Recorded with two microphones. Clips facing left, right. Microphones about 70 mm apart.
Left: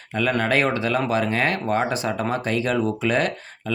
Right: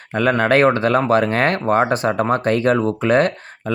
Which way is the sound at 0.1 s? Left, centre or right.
Right.